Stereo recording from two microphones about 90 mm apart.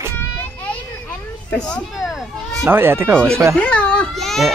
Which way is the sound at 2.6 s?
25° right (ahead or behind).